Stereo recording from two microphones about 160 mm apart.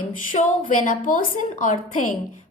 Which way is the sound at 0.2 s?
55° left (ahead or behind).